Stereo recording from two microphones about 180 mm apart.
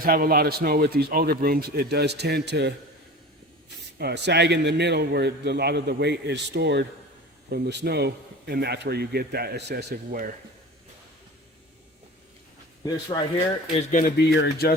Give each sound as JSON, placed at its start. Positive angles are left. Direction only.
{"t": 0.0, "sound": "speech", "side_deg": -55}
{"t": 3.9, "sound": "a man's voice", "side_deg": -65}
{"t": 12.8, "sound": "speech", "side_deg": 25}
{"t": 14.3, "sound": "speech", "side_deg": 60}